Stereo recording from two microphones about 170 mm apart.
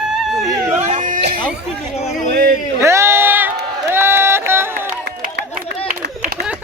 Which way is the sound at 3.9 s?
15° right (ahead or behind).